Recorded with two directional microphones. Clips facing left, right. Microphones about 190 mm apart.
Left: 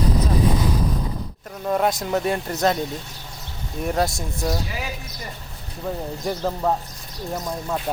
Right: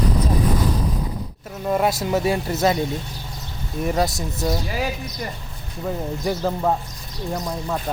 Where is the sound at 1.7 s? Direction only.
5° right (ahead or behind).